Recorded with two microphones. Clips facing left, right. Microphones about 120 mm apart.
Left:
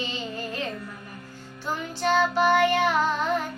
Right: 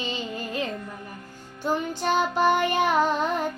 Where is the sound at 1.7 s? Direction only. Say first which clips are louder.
Even; 15° right (ahead or behind).